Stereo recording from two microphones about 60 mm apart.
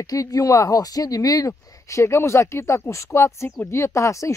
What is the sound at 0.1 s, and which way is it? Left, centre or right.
Speech, left.